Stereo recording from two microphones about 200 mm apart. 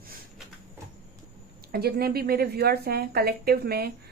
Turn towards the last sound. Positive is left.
turn(degrees=-50)  # may be behind; listen again after turning